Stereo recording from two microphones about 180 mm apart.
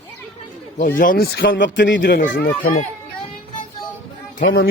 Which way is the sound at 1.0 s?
55° left (ahead or behind).